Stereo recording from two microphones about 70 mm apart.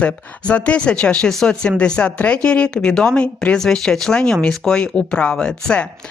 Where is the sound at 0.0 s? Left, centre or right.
Centre.